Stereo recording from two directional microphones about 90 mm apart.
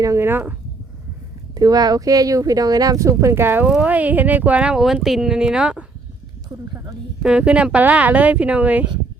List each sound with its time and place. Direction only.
0.0 s speech: 30° right (ahead or behind)
1.5 s speech: 45° right (ahead or behind); by 3.7 s 25° right (ahead or behind)
3.7 s speech: 15° right (ahead or behind)
7.2 s speech: 10° right (ahead or behind)